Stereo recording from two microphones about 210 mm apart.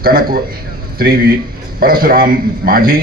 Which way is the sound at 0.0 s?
45° right (ahead or behind).